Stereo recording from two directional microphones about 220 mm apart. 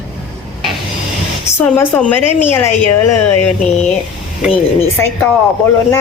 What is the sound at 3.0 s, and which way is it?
Speech, 90° left.